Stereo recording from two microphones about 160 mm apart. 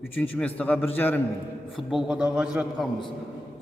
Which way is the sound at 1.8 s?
5° right (ahead or behind).